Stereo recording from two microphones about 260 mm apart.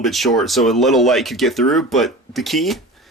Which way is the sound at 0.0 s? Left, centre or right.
Centre.